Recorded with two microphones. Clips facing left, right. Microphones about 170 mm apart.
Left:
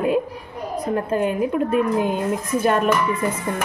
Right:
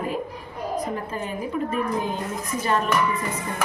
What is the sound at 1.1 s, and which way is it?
Speech, 65° left (ahead or behind).